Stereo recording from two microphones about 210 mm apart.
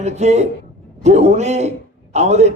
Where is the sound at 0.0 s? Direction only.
30° right (ahead or behind).